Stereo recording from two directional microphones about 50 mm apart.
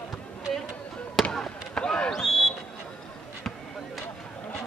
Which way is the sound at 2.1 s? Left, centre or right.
Centre.